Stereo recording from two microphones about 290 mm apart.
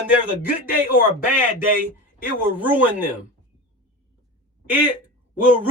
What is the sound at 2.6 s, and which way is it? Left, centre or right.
Speech, centre.